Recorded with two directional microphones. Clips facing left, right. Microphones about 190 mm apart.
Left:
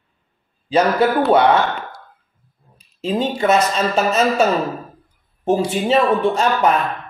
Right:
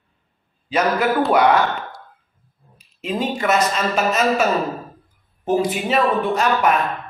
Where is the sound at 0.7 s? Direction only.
30° left (ahead or behind).